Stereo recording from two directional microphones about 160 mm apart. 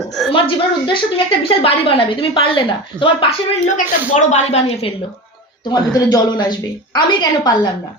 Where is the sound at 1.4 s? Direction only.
35° left (ahead or behind).